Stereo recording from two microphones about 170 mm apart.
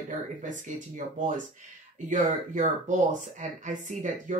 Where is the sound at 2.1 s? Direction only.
50° right (ahead or behind).